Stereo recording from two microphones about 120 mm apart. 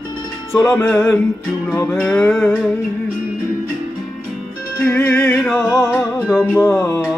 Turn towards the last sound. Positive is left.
turn(degrees=20)  # may be behind; listen again after turning